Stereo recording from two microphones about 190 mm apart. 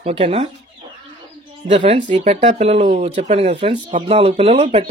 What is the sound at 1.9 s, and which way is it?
Chicken, 40° right (ahead or behind).